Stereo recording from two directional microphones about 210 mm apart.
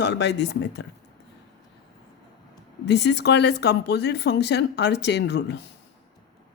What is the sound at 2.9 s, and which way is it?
Speech, 55° left (ahead or behind).